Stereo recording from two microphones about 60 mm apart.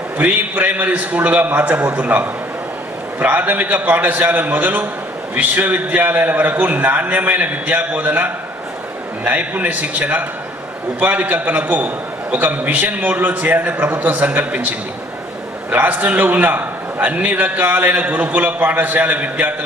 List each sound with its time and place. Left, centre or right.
0.2 s a man's voice: right
15.7 s a man's voice: right